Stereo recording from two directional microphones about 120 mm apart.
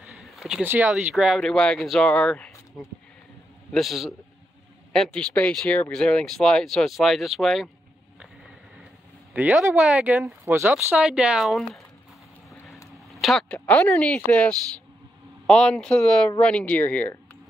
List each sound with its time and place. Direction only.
0.0 s a sound: centre (ahead or behind)
0.7 s speech: 10° right (ahead or behind)
9.3 s speech: 15° right (ahead or behind)
10.2 s speech: 20° right (ahead or behind); by 11.8 s centre (ahead or behind)
13.1 s a sound: centre (ahead or behind)
13.7 s speech: 10° left (ahead or behind)